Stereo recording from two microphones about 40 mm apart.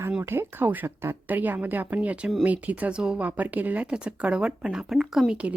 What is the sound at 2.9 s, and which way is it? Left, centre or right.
Speech, right.